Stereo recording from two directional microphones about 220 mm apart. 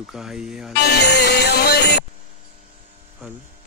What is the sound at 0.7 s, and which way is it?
Speech, 50° left (ahead or behind).